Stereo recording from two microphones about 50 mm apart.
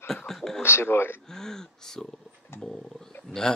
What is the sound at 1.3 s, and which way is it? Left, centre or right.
Speech, centre.